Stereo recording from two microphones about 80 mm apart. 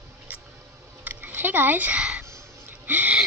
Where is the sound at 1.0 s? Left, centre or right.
Right.